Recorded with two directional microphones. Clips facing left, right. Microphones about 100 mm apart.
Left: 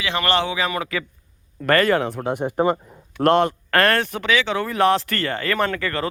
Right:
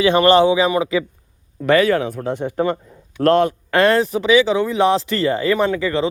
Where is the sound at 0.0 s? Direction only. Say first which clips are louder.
Right 9 dB; 20° right (ahead or behind).